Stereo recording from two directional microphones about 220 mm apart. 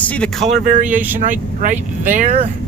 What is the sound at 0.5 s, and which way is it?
Speech, 35° right (ahead or behind).